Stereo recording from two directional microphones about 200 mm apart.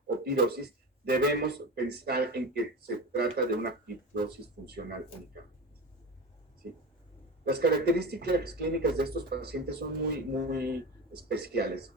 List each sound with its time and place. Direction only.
0.3 s speech: 50° right (ahead or behind)
7.4 s speech: 50° right (ahead or behind)